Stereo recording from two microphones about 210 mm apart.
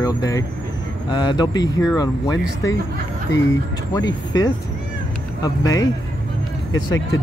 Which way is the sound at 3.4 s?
15° left (ahead or behind).